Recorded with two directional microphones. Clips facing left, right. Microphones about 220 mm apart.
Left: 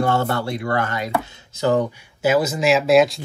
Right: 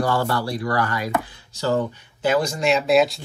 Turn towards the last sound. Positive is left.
turn(degrees=0)  # may be behind; listen again after turning